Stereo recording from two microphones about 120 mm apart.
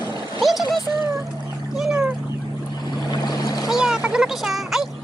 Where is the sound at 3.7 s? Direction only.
5° right (ahead or behind).